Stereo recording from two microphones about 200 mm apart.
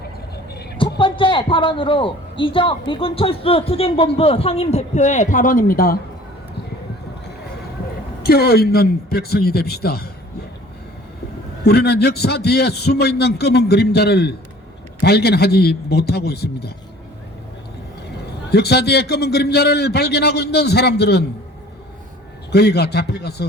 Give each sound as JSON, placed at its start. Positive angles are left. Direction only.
{"t": 0.5, "sound": "a sound", "side_deg": 55}
{"t": 0.8, "sound": "a man's voice", "side_deg": 25}
{"t": 8.2, "sound": "a man's voice", "side_deg": 50}
{"t": 11.6, "sound": "a man's voice", "side_deg": 55}
{"t": 18.5, "sound": "a man's voice", "side_deg": 55}
{"t": 22.5, "sound": "a man's voice", "side_deg": 55}